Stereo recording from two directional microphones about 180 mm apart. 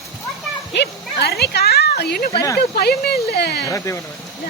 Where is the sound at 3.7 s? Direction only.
15° left (ahead or behind).